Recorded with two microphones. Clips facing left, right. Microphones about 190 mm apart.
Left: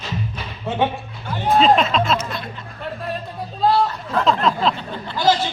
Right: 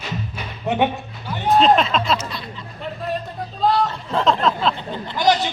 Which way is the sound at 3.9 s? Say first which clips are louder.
Even; 25° right (ahead or behind).